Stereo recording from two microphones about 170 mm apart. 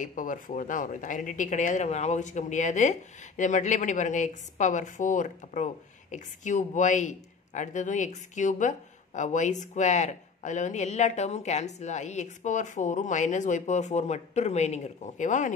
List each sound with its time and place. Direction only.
0.0 s speech: 50° left (ahead or behind)